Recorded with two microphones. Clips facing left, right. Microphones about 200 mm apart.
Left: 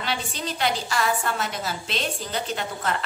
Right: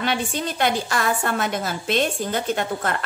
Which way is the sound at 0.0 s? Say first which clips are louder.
Right 5 dB; 50° right (ahead or behind).